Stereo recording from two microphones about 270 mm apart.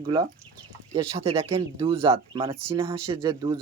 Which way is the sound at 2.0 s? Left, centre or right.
Centre.